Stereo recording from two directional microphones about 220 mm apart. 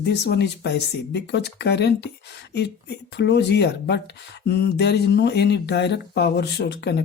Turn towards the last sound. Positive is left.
turn(degrees=50)  # may be behind; listen again after turning